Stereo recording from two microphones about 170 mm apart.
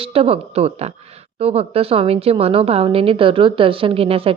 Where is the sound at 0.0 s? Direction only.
35° right (ahead or behind).